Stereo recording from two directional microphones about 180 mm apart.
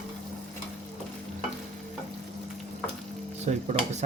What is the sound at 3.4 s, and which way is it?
Speech, 40° right (ahead or behind).